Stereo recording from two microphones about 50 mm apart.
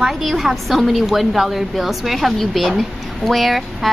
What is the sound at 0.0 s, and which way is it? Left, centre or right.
Speech, centre.